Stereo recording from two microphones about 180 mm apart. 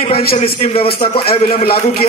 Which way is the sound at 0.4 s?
40° left (ahead or behind).